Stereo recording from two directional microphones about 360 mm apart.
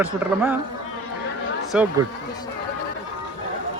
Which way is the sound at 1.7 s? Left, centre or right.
Centre.